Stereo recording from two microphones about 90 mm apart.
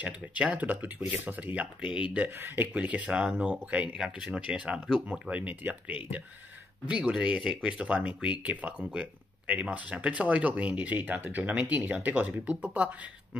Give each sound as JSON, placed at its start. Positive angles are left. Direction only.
{"t": 0.0, "sound": "speech", "side_deg": -15}
{"t": 2.4, "sound": "speech", "side_deg": -20}
{"t": 5.3, "sound": "speech", "side_deg": -15}